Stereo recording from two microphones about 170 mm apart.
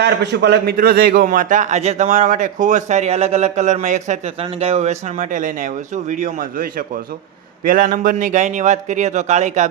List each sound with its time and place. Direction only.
0.0 s a man's voice: 90° right; by 9.6 s 40° right (ahead or behind)